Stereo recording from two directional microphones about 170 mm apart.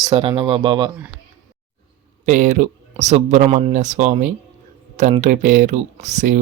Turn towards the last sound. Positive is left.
turn(degrees=-45)  # may be behind; listen again after turning